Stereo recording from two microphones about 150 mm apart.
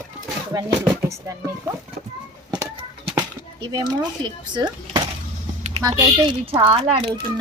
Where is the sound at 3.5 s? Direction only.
30° right (ahead or behind).